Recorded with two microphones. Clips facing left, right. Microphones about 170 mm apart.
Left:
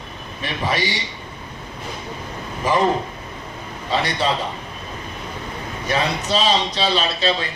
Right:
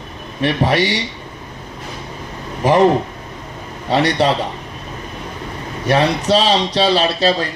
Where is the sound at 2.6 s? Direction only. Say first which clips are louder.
Right 6 dB; 70° right (ahead or behind).